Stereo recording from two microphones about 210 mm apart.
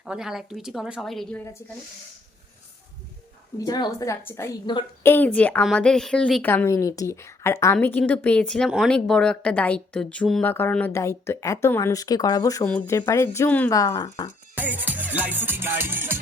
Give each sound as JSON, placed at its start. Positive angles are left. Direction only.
{"t": 0.0, "sound": "a woman's voice", "side_deg": 0}
{"t": 3.6, "sound": "a woman's voice", "side_deg": 20}
{"t": 14.5, "sound": "music", "side_deg": -10}